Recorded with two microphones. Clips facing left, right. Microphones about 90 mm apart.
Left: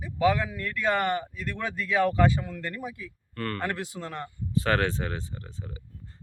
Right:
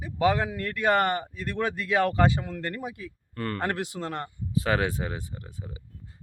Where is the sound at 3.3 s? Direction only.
15° right (ahead or behind).